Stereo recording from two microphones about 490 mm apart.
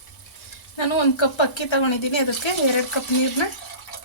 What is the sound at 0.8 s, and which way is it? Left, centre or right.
Speech, left.